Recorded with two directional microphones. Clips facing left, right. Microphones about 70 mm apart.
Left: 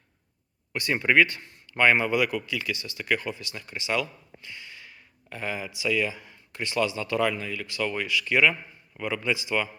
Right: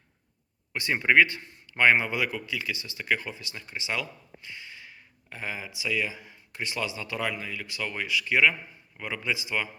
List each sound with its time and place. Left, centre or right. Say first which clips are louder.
0.7 s a man's voice: even; right